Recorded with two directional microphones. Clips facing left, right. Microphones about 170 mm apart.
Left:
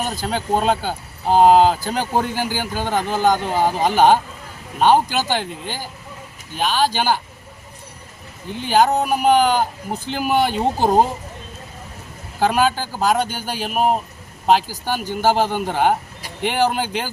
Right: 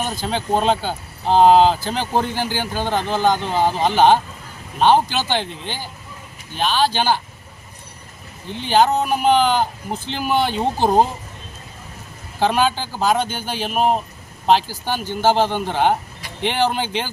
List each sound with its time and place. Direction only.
0.2 s speech: 10° left (ahead or behind)
8.6 s speech: 10° left (ahead or behind)
12.4 s speech: 5° left (ahead or behind)